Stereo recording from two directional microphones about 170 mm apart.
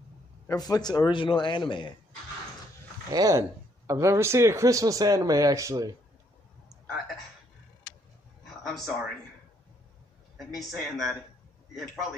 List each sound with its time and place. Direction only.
0.5 s a man's voice: 25° left (ahead or behind)
3.1 s speech: 20° right (ahead or behind)
8.6 s speech: centre (ahead or behind)
10.3 s speech: centre (ahead or behind)